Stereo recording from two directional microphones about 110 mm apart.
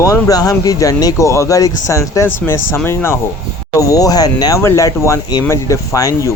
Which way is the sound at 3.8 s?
30° left (ahead or behind).